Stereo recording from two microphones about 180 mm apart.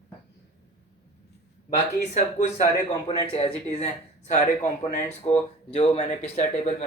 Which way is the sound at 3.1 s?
35° left (ahead or behind).